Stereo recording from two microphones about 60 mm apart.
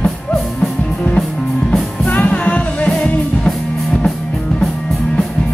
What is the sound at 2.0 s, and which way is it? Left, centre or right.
Music, left.